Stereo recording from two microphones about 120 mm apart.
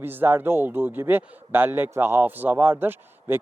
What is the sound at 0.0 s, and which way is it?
A man's voice, 15° right (ahead or behind).